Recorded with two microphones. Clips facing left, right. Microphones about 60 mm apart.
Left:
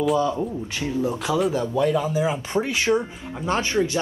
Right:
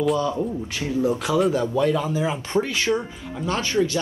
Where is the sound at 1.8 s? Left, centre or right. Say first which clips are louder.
Left 4 dB; centre.